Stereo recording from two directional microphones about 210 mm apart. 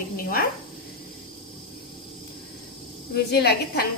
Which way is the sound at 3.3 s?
50° left (ahead or behind).